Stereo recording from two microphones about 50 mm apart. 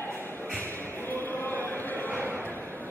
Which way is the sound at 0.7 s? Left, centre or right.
Left.